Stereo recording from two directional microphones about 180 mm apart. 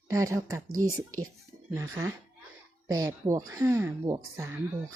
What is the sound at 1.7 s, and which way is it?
Speech, 15° right (ahead or behind).